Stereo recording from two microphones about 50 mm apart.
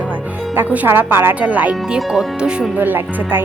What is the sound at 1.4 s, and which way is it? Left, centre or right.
Speech, right.